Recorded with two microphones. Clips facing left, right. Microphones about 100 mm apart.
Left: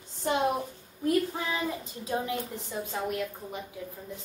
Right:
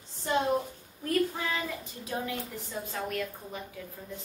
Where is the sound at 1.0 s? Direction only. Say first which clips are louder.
Left 2 dB; 20° left (ahead or behind).